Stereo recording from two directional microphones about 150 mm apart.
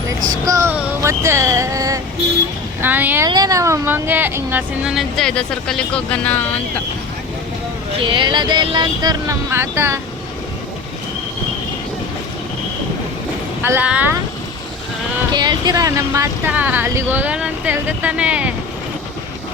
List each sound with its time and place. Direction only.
0.4 s speech: 20° right (ahead or behind)
0.7 s music: 15° right (ahead or behind)
2.8 s speech: 10° right (ahead or behind)
3.2 s speech: 25° right (ahead or behind); by 6.4 s 10° left (ahead or behind)
7.9 s speech: 35° right (ahead or behind); by 10.0 s 15° right (ahead or behind)
13.6 s speech: 15° right (ahead or behind)
15.3 s speech: 30° right (ahead or behind)
16.5 s speech: 10° right (ahead or behind)